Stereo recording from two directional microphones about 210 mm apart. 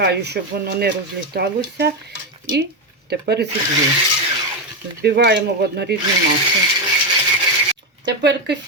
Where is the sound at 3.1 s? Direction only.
50° right (ahead or behind).